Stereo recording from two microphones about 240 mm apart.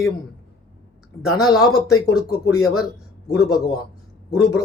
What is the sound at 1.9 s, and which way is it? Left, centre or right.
Speech, left.